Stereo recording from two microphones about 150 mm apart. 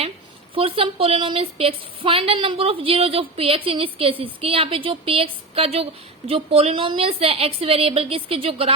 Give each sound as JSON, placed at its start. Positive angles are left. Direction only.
{"t": 0.5, "sound": "a woman's voice", "side_deg": -35}